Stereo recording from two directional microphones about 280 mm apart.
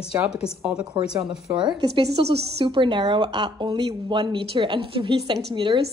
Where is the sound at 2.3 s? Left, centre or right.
Centre.